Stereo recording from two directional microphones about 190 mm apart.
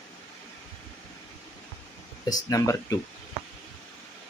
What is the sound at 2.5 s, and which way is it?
Speech, 15° left (ahead or behind).